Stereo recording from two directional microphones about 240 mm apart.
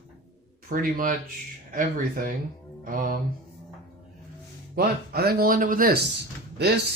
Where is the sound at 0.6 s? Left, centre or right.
Right.